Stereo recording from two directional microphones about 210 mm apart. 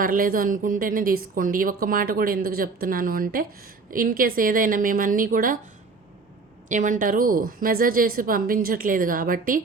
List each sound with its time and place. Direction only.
0.0 s a woman's voice: 40° right (ahead or behind)
6.7 s a woman's voice: 35° right (ahead or behind)